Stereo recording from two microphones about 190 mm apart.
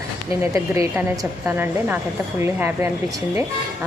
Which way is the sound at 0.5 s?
15° right (ahead or behind).